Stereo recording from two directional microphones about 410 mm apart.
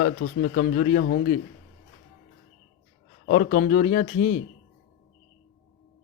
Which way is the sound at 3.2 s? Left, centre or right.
Centre.